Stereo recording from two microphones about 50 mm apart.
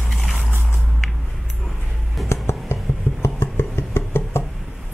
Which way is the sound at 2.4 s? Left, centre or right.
Left.